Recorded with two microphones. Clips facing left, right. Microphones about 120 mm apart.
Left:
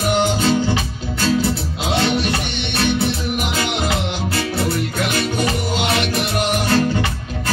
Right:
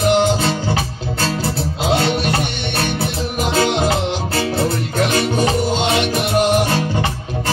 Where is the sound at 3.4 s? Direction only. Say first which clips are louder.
Right 10 dB; 35° right (ahead or behind).